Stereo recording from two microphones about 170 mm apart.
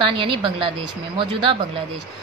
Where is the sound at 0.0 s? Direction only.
30° right (ahead or behind).